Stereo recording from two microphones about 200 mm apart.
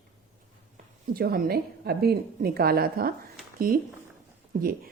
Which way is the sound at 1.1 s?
50° right (ahead or behind).